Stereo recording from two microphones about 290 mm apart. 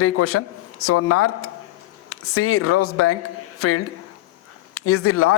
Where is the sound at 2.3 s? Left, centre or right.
Left.